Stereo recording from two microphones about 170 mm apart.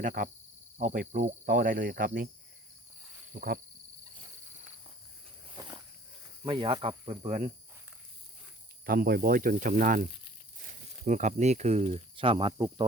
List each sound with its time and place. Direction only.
0.0 s cricket: 50° right (ahead or behind)
3.3 s cricket: 55° right (ahead or behind)
5.5 s a sound: 25° right (ahead or behind)
6.4 s speech: 25° right (ahead or behind)
7.3 s cricket: 40° right (ahead or behind)
8.9 s speech: 60° right (ahead or behind)
11.0 s speech: 45° right (ahead or behind); by 12.8 s 30° right (ahead or behind)